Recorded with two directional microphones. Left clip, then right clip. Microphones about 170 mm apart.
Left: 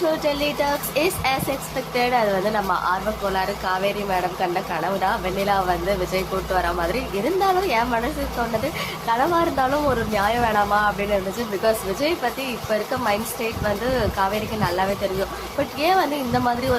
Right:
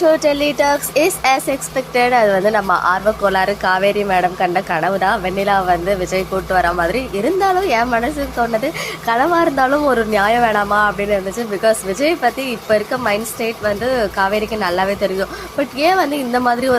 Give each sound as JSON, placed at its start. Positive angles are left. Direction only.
{"t": 0.0, "sound": "speech", "side_deg": -35}